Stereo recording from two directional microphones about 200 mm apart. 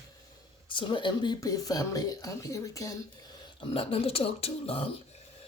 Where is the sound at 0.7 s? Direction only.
25° left (ahead or behind).